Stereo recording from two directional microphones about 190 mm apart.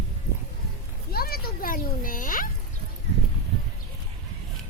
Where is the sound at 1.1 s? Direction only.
50° left (ahead or behind).